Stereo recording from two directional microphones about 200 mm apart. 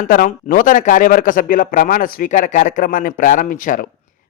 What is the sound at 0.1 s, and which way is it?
A man's voice, 45° left (ahead or behind).